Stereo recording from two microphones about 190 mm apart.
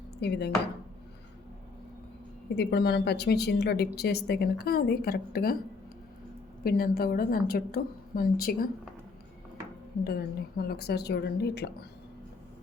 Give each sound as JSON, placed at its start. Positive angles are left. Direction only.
{"t": 0.2, "sound": "a woman's voice", "side_deg": 60}
{"t": 2.6, "sound": "a woman's voice", "side_deg": 60}
{"t": 6.7, "sound": "a woman's voice", "side_deg": 50}
{"t": 10.0, "sound": "a woman's voice", "side_deg": 55}